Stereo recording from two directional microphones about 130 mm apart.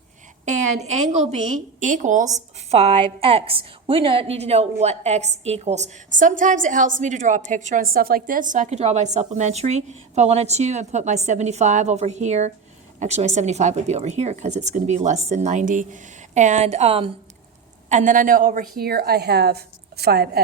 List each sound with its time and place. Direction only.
0.4 s a woman's voice: 65° right (ahead or behind)
17.8 s speech: 75° right (ahead or behind); by 18.8 s 90° right